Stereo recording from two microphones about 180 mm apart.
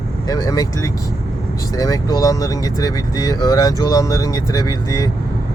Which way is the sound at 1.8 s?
20° left (ahead or behind).